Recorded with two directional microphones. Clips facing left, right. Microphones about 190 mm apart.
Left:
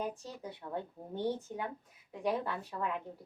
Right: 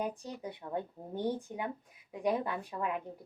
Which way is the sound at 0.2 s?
15° right (ahead or behind).